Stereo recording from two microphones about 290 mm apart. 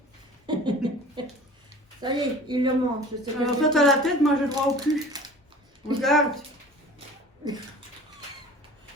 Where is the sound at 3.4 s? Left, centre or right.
Centre.